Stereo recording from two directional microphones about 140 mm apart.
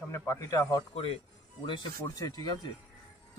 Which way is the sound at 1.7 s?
30° left (ahead or behind).